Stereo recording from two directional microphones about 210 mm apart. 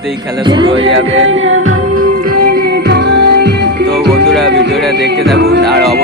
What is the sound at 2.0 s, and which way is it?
Music, 45° right (ahead or behind).